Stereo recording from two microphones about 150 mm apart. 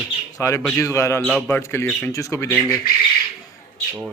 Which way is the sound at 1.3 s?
10° left (ahead or behind).